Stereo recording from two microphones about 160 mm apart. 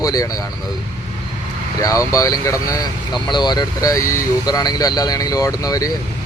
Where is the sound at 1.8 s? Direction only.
20° left (ahead or behind).